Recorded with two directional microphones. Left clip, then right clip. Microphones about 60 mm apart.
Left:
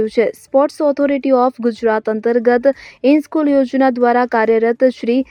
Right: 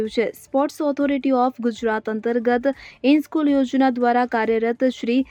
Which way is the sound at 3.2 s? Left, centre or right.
Centre.